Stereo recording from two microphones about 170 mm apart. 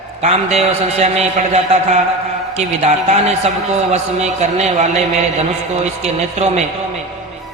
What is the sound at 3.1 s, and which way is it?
A man's voice, 40° right (ahead or behind).